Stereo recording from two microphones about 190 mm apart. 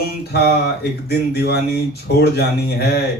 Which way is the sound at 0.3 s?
60° left (ahead or behind).